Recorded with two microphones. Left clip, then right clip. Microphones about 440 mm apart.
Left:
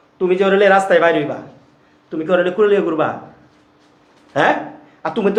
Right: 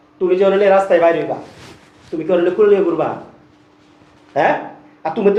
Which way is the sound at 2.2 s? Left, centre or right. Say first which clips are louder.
Right 2 dB; left.